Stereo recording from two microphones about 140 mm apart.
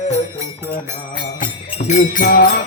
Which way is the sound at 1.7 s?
60° left (ahead or behind).